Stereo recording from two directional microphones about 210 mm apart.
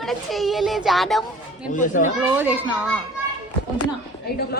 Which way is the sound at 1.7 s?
35° left (ahead or behind).